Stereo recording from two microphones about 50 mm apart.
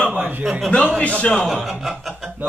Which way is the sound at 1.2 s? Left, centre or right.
Centre.